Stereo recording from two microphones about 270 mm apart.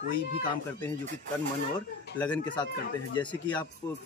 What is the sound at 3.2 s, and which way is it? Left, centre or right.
Speech, centre.